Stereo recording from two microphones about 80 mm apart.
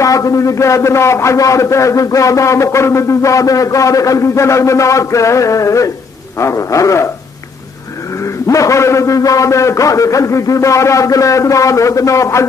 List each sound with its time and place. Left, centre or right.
0.0 s a man's voice: left
8.5 s a man's voice: left